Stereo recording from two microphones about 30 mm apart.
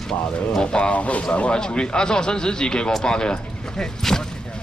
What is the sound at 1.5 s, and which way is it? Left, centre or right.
Speech, left.